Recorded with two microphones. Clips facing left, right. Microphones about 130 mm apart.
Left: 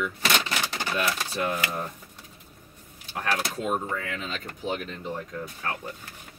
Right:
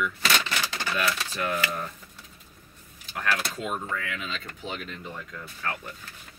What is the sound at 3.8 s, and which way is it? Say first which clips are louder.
Speech: left 1 dB; 25° left (ahead or behind).